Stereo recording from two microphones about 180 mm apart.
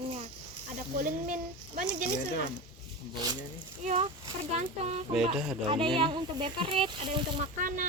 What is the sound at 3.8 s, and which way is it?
Speech, 40° right (ahead or behind).